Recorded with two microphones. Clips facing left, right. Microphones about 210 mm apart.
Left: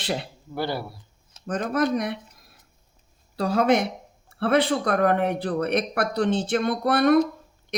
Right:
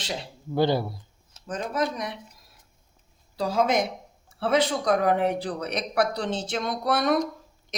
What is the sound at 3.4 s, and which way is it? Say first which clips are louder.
Speech: left 3 dB; 65° left (ahead or behind).